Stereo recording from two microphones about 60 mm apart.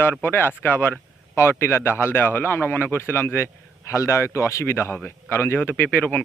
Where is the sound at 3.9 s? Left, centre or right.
Left.